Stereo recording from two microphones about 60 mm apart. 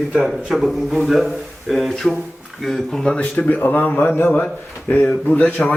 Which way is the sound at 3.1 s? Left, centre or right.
Left.